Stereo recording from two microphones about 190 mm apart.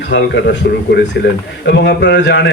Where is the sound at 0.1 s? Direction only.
60° left (ahead or behind).